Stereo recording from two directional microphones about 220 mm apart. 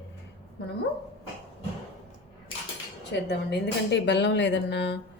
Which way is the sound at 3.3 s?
50° left (ahead or behind).